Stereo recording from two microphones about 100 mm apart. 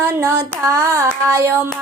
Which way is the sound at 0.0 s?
25° right (ahead or behind).